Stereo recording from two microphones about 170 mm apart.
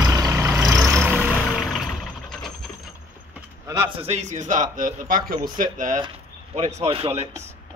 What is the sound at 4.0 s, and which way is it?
Speech, 40° right (ahead or behind).